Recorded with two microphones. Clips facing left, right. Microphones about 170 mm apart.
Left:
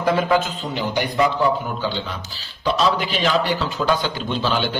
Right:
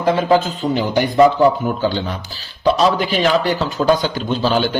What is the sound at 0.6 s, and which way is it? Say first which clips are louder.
A man's voice: right 6 dB; 45° right (ahead or behind).